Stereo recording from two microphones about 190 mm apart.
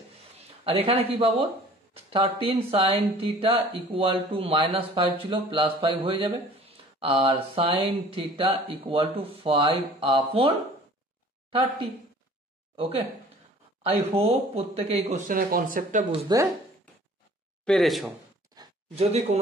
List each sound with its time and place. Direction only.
0.7 s speech: 30° right (ahead or behind)
12.7 s speech: 30° right (ahead or behind)
16.1 s speech: 25° right (ahead or behind)
17.6 s speech: centre (ahead or behind)
18.9 s speech: 35° right (ahead or behind)